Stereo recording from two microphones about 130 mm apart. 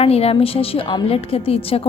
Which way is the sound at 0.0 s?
50° left (ahead or behind).